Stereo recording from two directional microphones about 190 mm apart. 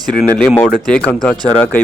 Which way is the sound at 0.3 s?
5° left (ahead or behind).